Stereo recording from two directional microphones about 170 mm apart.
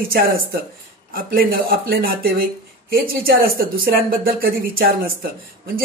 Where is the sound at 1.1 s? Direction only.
65° right (ahead or behind).